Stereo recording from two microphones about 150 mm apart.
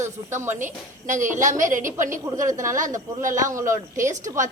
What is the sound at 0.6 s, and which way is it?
A woman's voice, 55° right (ahead or behind).